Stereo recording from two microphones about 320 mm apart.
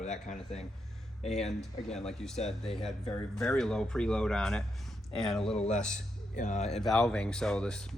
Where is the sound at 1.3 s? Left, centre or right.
Centre.